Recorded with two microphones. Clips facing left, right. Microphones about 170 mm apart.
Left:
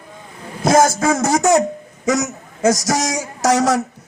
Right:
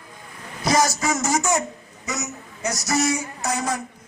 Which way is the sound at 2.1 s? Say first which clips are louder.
Left 11 dB; 90° left.